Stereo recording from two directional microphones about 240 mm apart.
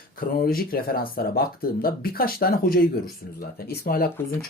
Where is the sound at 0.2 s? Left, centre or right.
Left.